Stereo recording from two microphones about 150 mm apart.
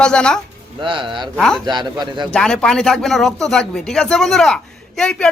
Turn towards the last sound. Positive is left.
turn(degrees=5)  # may be behind; listen again after turning